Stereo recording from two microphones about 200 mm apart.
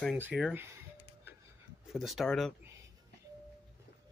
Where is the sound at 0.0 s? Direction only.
5° right (ahead or behind).